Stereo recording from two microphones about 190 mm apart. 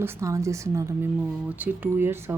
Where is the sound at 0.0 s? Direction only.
15° right (ahead or behind).